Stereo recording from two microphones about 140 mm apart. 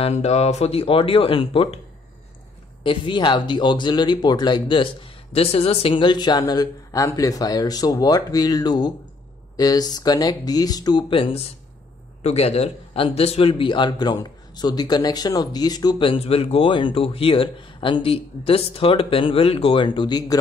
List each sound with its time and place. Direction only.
0.0 s speech: 50° left (ahead or behind)
2.8 s a man's voice: 35° left (ahead or behind)